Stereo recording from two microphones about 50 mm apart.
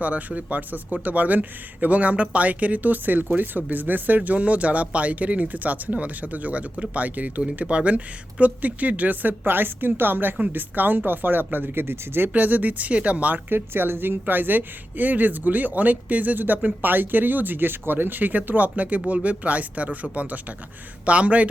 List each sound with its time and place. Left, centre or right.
0.0 s speech: right
12.3 s speech: right
13.3 s speech: right